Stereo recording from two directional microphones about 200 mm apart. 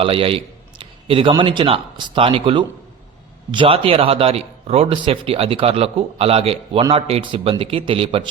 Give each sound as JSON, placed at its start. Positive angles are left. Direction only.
{"t": 0.0, "sound": "a man's voice", "side_deg": -25}